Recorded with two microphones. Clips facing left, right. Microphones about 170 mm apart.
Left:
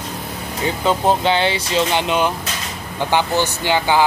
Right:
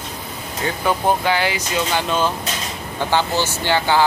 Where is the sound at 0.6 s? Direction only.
20° left (ahead or behind).